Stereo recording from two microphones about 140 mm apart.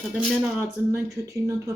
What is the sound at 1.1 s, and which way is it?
Speech, 25° right (ahead or behind).